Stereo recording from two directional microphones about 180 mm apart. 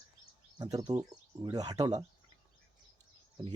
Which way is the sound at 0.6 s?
20° right (ahead or behind).